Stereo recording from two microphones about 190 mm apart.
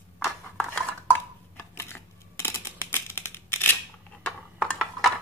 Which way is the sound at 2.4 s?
10° left (ahead or behind).